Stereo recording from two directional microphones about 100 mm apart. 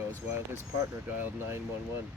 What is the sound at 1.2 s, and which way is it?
Speech, 25° right (ahead or behind).